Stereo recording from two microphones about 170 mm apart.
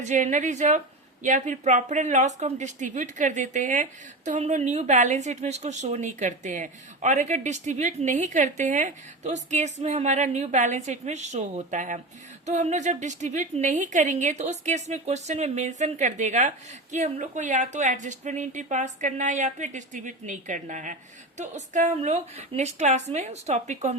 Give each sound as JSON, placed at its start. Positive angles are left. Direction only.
{"t": 0.0, "sound": "a woman's voice", "side_deg": -45}